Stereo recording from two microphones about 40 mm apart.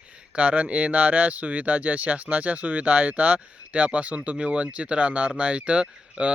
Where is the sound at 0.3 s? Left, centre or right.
Right.